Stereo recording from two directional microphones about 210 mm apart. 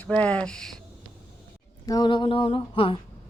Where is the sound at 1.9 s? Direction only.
20° left (ahead or behind).